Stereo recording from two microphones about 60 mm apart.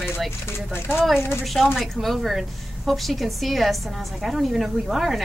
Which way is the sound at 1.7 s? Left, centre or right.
Centre.